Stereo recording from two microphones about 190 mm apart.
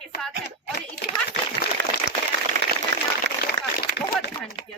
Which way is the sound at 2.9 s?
65° right (ahead or behind).